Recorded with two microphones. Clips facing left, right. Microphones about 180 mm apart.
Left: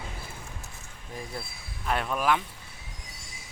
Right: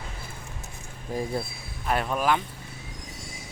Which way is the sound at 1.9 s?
Centre (ahead or behind).